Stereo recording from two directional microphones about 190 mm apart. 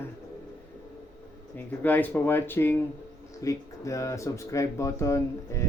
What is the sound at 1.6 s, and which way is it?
Speech, 10° left (ahead or behind).